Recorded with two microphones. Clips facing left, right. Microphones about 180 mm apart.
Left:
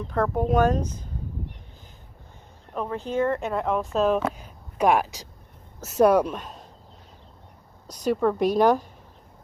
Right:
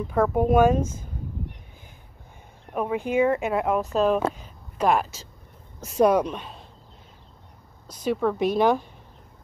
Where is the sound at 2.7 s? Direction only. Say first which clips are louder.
Right 3 dB; 10° right (ahead or behind).